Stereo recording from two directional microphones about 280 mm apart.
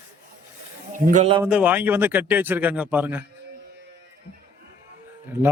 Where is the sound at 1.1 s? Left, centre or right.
Right.